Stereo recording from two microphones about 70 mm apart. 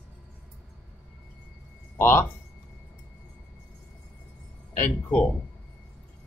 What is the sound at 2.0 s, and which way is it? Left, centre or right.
Speech, left.